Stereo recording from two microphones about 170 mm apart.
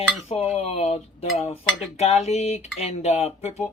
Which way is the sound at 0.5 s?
40° left (ahead or behind).